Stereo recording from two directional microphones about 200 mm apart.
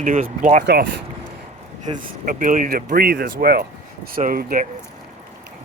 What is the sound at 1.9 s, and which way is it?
Speech, 40° right (ahead or behind).